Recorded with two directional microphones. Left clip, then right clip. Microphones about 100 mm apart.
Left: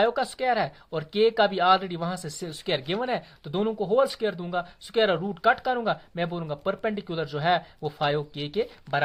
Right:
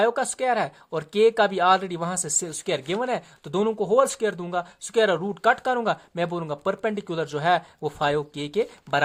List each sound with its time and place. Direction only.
0.0 s speech: 20° right (ahead or behind)
3.5 s speech: 35° right (ahead or behind)